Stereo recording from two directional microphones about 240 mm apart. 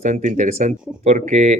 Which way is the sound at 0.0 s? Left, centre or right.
Right.